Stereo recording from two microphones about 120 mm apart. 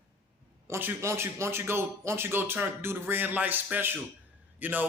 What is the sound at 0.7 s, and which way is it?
A man's voice, 20° right (ahead or behind).